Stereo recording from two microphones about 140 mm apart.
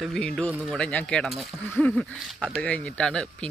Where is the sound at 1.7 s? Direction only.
10° left (ahead or behind).